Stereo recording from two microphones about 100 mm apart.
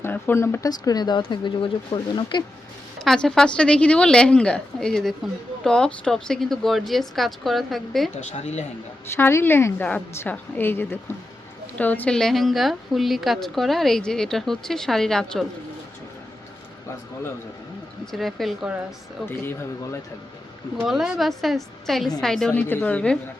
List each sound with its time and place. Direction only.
0.0 s speech: 25° left (ahead or behind)
0.7 s speech: 40° left (ahead or behind)
1.2 s speech: 55° left (ahead or behind)
3.0 s a woman's voice: 5° left (ahead or behind)
9.1 s a woman's voice: 25° left (ahead or behind)
12.1 s a woman's voice: 5° left (ahead or behind)
18.0 s a woman's voice: centre (ahead or behind)
19.2 s speech: 20° left (ahead or behind)
20.7 s a woman's voice: 5° right (ahead or behind); by 23.1 s 15° left (ahead or behind)